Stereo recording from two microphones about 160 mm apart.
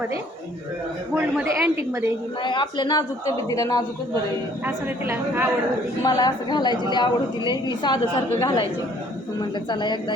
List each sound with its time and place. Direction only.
1.1 s a woman's voice: 15° right (ahead or behind)
2.4 s a woman's voice: 30° left (ahead or behind)
4.6 s a woman's voice: 10° right (ahead or behind)
6.0 s a woman's voice: 25° left (ahead or behind)
9.6 s a woman's voice: 30° left (ahead or behind)